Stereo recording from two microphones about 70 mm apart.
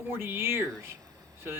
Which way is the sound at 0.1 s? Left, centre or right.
Right.